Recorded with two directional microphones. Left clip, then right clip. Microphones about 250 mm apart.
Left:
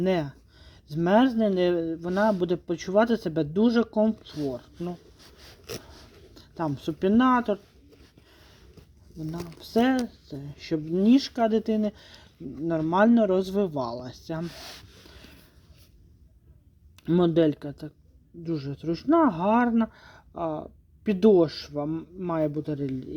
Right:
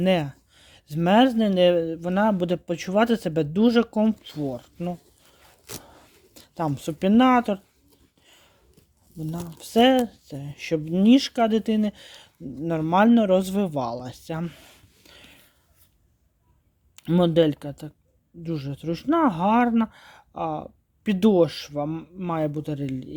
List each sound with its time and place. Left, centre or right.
0.0 s speech: right
6.3 s speech: right
9.6 s speech: right
17.0 s speech: right